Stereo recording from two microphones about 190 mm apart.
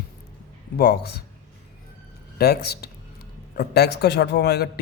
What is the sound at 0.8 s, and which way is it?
Speech, 55° left (ahead or behind).